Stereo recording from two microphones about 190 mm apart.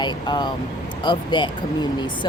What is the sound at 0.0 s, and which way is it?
Speech, 25° left (ahead or behind).